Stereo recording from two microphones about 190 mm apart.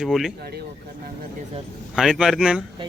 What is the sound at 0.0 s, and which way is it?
Speech, centre (ahead or behind).